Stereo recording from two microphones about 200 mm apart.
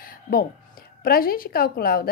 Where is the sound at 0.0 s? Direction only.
50° left (ahead or behind).